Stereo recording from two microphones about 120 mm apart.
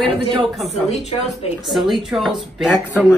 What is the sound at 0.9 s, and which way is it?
Speech, 65° left (ahead or behind).